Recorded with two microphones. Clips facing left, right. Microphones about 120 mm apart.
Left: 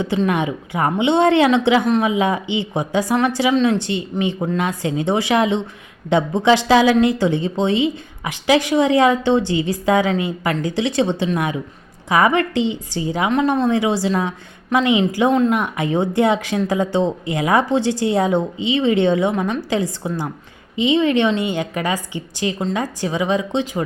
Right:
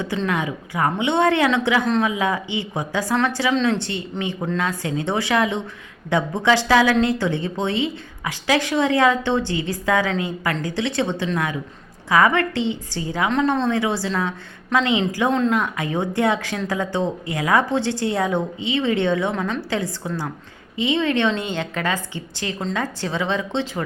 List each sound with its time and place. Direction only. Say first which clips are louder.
0.0 s a woman's voice: left 4 dB; 20° left (ahead or behind)